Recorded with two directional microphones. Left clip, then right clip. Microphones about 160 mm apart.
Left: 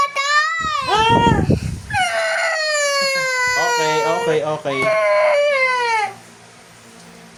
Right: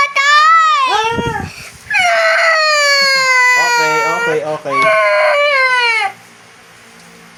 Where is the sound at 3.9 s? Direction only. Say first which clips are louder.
Right 4 dB; 20° left (ahead or behind).